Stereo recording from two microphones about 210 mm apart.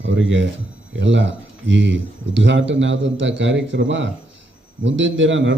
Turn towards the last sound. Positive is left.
turn(degrees=-60)  # may be behind; listen again after turning